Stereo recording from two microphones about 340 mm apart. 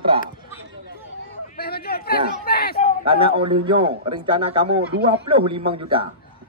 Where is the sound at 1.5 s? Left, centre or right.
Left.